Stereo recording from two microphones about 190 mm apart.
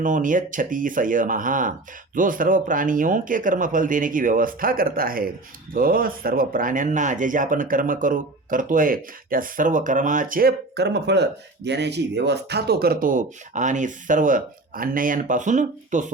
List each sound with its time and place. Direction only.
0.0 s speech: 45° right (ahead or behind)